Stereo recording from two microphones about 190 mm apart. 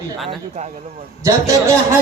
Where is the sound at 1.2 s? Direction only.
15° right (ahead or behind).